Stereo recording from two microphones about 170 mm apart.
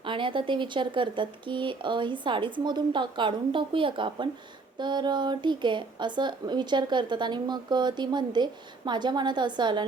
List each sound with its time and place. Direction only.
0.0 s a woman's voice: 30° right (ahead or behind)